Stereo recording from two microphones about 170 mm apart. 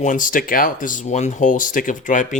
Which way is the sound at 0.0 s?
50° left (ahead or behind).